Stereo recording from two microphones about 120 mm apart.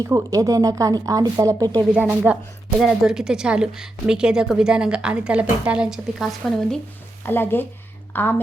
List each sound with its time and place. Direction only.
0.0 s speech: 30° right (ahead or behind)
1.9 s a woman's voice: 10° right (ahead or behind)
7.3 s a woman's voice: 15° left (ahead or behind)